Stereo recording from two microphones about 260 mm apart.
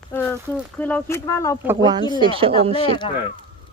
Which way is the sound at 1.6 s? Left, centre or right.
Centre.